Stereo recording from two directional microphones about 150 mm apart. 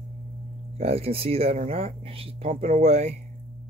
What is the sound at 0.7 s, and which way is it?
Speech, 40° right (ahead or behind).